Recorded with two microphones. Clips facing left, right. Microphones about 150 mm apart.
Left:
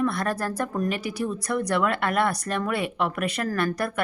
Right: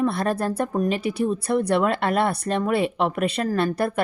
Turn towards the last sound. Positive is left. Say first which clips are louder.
# right 4 dB
turn(degrees=-25)  # may be behind; listen again after turning